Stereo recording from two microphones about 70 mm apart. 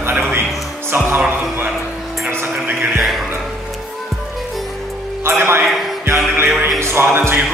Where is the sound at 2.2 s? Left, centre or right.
Right.